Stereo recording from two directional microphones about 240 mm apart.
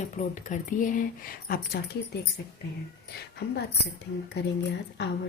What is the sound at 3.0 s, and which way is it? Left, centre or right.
Speech, left.